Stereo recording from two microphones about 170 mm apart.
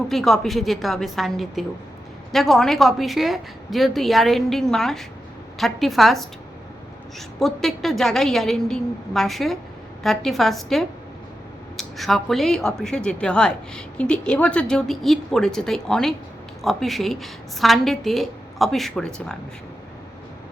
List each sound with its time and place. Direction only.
0.1 s speech: centre (ahead or behind)
7.3 s speech: centre (ahead or behind)